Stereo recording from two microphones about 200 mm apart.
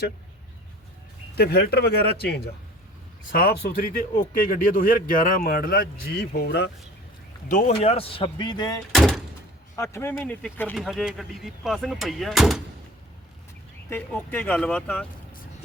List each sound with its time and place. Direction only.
1.4 s speech: 50° left (ahead or behind)
7.4 s speech: 40° left (ahead or behind); by 8.8 s 20° left (ahead or behind)
8.9 s speech: centre (ahead or behind)
9.7 s speech: 15° left (ahead or behind); by 12.6 s centre (ahead or behind)
13.9 s speech: 10° left (ahead or behind)